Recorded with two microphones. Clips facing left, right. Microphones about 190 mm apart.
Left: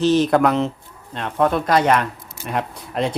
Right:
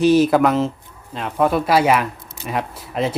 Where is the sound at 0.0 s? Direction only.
10° right (ahead or behind).